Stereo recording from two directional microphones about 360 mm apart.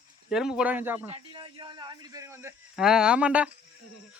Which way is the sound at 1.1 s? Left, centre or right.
Centre.